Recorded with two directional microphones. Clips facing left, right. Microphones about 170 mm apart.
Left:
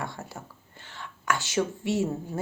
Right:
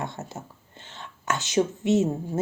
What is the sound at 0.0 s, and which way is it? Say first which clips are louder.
Speech: right 3 dB; 20° right (ahead or behind).